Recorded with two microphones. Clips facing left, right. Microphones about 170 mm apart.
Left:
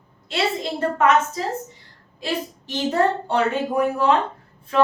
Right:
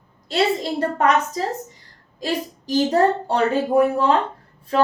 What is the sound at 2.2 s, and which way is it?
A woman's voice, 35° right (ahead or behind).